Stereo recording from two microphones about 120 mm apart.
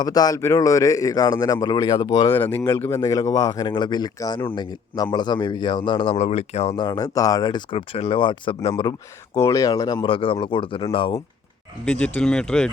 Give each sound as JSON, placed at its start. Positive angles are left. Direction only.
{"t": 0.0, "sound": "a man's voice", "side_deg": 30}
{"t": 2.3, "sound": "a man's voice", "side_deg": 15}
{"t": 6.1, "sound": "speech", "side_deg": 60}
{"t": 6.7, "sound": "speech", "side_deg": 35}
{"t": 9.4, "sound": "a man's voice", "side_deg": 30}
{"t": 10.1, "sound": "speech", "side_deg": 50}
{"t": 11.9, "sound": "speech", "side_deg": 10}